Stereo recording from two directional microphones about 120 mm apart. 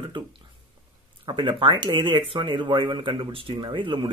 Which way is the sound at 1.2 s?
40° right (ahead or behind).